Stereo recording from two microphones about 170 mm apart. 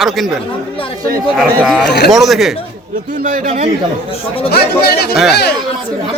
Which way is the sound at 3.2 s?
50° right (ahead or behind).